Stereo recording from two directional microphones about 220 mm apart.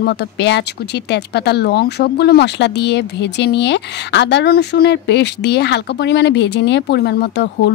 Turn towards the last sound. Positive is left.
turn(degrees=50)  # may be behind; listen again after turning